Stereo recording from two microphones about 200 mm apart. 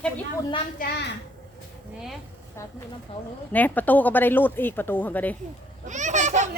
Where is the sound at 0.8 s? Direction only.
55° left (ahead or behind).